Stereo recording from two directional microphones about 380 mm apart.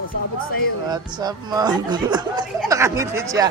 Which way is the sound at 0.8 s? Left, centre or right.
Centre.